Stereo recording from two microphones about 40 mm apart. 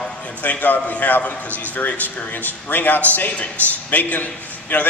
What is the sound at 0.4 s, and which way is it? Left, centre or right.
A man's voice, left.